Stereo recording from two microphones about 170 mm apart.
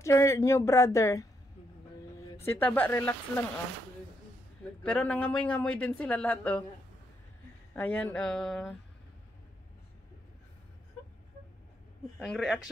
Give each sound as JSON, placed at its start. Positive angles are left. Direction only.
{"t": 0.0, "sound": "speech", "side_deg": 15}
{"t": 2.4, "sound": "speech", "side_deg": 10}
{"t": 4.8, "sound": "speech", "side_deg": 5}
{"t": 7.7, "sound": "speech", "side_deg": 10}
{"t": 12.2, "sound": "speech", "side_deg": 0}